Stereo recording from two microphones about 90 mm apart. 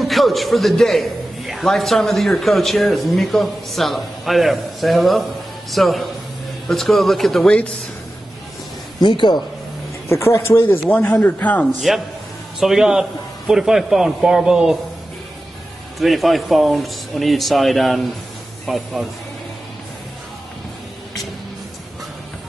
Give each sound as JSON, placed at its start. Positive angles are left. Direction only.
{"t": 0.0, "sound": "a man's voice", "side_deg": 0}
{"t": 9.0, "sound": "a man's voice", "side_deg": 60}
{"t": 10.0, "sound": "a man's voice", "side_deg": 30}
{"t": 12.5, "sound": "a man's voice", "side_deg": -5}
{"t": 16.0, "sound": "a man's voice", "side_deg": 0}